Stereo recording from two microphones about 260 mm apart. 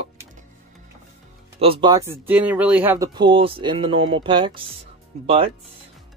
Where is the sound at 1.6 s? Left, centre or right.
Centre.